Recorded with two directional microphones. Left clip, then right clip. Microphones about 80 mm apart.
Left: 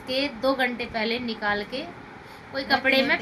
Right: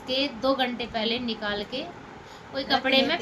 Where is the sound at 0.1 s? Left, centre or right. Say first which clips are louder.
Left 1 dB; left.